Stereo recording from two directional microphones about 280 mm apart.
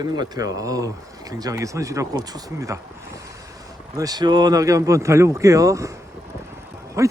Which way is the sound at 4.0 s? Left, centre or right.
Centre.